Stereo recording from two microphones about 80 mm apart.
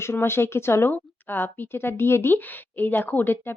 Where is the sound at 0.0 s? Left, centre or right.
Left.